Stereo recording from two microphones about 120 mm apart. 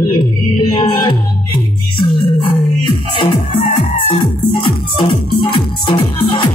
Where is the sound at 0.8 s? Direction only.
55° left (ahead or behind).